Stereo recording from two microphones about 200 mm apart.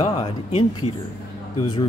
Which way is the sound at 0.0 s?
30° left (ahead or behind).